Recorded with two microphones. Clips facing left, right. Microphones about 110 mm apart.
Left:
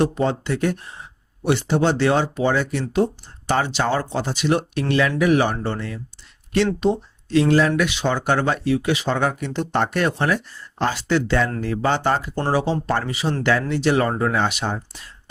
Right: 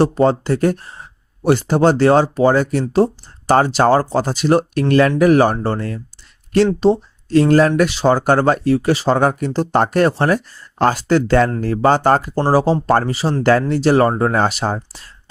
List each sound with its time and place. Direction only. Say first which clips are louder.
0.0 s speech: right 6 dB; 35° right (ahead or behind)